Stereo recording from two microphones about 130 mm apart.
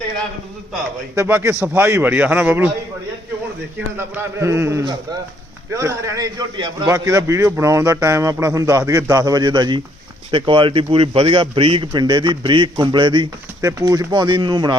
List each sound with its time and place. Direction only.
1.1 s a man's voice: 20° right (ahead or behind)
3.9 s a man's voice: 20° right (ahead or behind); by 13.2 s 40° right (ahead or behind)
13.6 s a man's voice: 25° right (ahead or behind)